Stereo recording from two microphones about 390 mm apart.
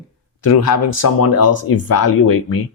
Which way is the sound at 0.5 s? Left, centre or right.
Left.